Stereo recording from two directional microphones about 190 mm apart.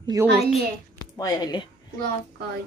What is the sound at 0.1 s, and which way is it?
Speech, 20° right (ahead or behind).